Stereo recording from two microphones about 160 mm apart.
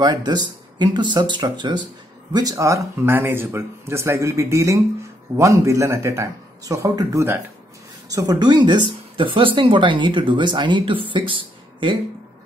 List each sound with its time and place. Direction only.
0.0 s speech: 25° right (ahead or behind)